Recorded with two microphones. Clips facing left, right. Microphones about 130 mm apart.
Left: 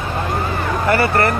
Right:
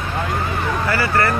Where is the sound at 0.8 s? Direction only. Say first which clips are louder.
Left 4 dB; 25° left (ahead or behind).